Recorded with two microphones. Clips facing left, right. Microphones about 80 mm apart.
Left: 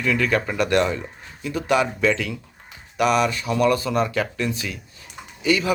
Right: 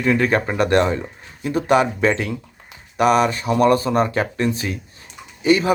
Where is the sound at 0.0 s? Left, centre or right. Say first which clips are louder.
Right 4 dB; right.